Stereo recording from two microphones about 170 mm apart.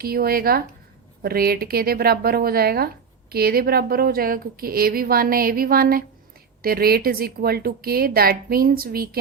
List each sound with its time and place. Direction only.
0.0 s speech: 60° right (ahead or behind)